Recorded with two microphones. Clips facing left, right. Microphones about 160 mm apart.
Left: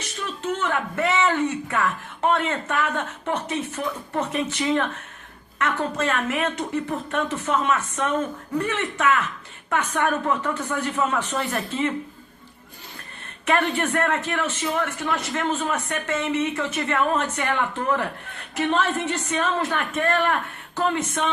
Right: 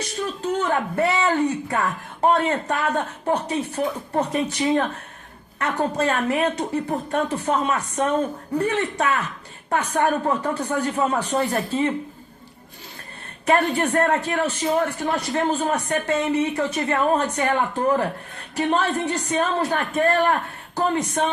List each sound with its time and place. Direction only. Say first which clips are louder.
0.0 s a man's voice: right 4 dB; 35° right (ahead or behind)
13.4 s a man's voice: right 3 dB; 35° right (ahead or behind)